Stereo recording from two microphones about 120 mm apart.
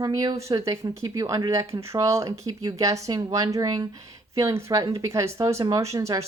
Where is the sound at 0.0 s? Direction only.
30° right (ahead or behind).